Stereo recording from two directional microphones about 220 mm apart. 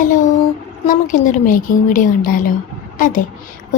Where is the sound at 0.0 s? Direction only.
35° left (ahead or behind).